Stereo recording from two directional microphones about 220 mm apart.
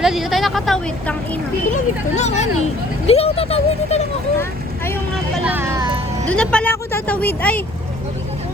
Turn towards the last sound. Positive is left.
turn(degrees=5)  # may be behind; listen again after turning